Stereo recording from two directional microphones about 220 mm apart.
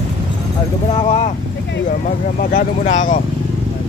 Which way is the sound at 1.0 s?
25° left (ahead or behind).